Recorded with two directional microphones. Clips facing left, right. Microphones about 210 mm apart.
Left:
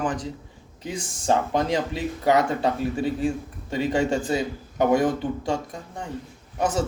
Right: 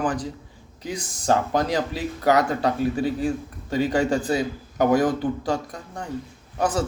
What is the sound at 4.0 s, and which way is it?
Speech, centre (ahead or behind).